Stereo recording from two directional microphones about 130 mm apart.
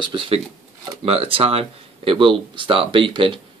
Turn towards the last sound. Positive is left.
turn(degrees=-40)  # may be behind; listen again after turning